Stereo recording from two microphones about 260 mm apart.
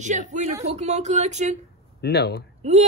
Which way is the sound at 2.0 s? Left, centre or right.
Left.